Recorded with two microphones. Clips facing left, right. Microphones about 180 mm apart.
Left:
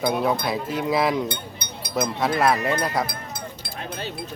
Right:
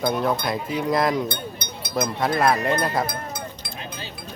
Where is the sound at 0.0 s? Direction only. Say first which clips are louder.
Even; 5° left (ahead or behind).